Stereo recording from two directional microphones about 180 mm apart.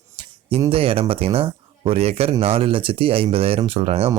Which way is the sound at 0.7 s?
30° right (ahead or behind).